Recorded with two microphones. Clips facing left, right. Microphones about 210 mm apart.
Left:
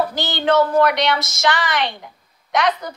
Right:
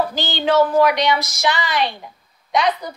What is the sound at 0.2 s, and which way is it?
A woman's voice, 60° left (ahead or behind).